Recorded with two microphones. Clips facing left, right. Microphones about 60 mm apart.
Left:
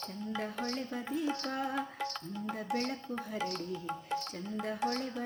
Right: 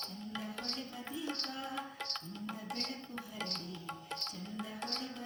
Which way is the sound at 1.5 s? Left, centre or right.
Left.